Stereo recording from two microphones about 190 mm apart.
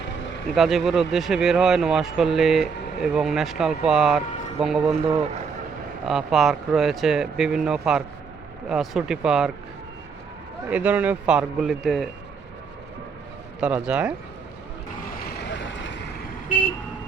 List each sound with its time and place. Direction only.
0.5 s speech: centre (ahead or behind)
6.1 s speech: centre (ahead or behind)
10.7 s speech: 10° right (ahead or behind)
13.6 s speech: 5° right (ahead or behind)
15.2 s vehicle: 60° left (ahead or behind)